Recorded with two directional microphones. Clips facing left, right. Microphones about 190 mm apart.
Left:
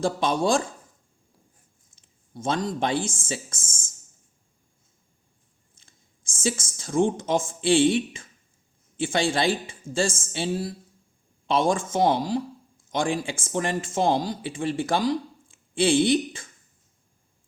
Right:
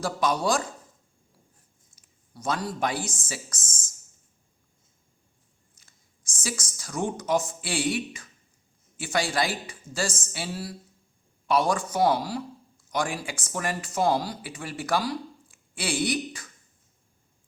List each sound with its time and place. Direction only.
0.0 s speech: 25° left (ahead or behind)
2.0 s speech: 25° left (ahead or behind)
6.4 s speech: 25° left (ahead or behind)